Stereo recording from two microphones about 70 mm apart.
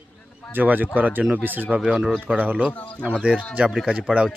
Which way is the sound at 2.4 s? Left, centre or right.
Right.